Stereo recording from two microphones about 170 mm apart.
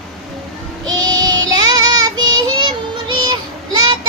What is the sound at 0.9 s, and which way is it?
Child singing, 20° right (ahead or behind).